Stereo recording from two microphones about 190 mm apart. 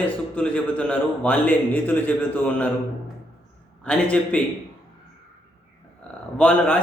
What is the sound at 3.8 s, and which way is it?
Speech, 5° left (ahead or behind).